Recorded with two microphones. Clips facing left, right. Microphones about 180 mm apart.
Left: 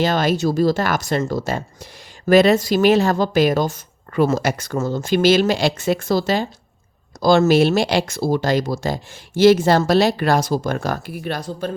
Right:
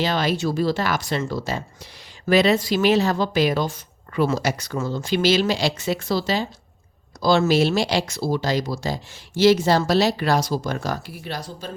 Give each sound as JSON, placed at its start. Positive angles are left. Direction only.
{"t": 0.0, "sound": "speech", "side_deg": 45}